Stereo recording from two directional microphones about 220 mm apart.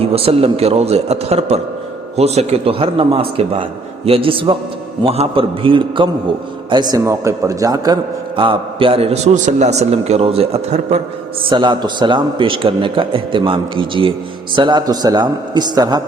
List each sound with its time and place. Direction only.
0.0 s a man's voice: 25° right (ahead or behind)